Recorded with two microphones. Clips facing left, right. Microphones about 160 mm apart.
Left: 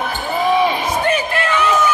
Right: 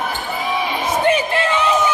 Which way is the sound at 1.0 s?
20° right (ahead or behind).